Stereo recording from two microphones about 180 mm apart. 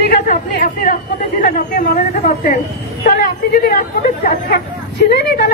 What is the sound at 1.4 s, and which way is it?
A woman's voice, 45° left (ahead or behind).